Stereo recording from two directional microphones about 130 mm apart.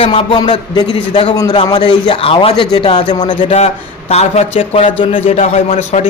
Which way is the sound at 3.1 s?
35° left (ahead or behind).